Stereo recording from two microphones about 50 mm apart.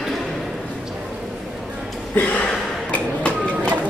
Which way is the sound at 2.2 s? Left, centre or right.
Left.